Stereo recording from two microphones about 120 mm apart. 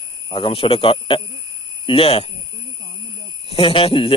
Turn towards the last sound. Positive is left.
turn(degrees=50)  # may be behind; listen again after turning